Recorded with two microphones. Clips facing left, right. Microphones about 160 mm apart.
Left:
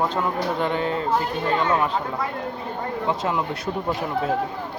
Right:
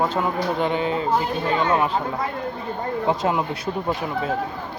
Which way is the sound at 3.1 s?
20° right (ahead or behind).